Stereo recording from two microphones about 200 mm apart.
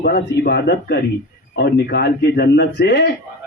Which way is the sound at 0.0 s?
55° left (ahead or behind).